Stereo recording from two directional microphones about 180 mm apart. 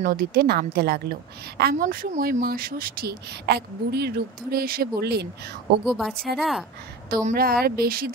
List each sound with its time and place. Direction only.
0.0 s a woman's voice: 55° right (ahead or behind)
5.9 s a woman's voice: centre (ahead or behind)
7.3 s a woman's voice: 55° right (ahead or behind)